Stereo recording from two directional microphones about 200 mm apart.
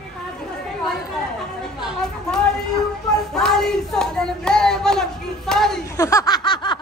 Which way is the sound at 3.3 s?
Centre (ahead or behind).